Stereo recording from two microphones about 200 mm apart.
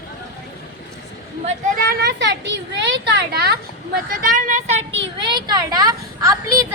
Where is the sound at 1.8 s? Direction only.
50° right (ahead or behind); by 4.8 s 35° right (ahead or behind).